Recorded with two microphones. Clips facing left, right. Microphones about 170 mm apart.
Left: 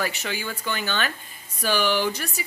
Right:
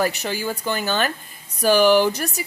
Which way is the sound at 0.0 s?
40° right (ahead or behind).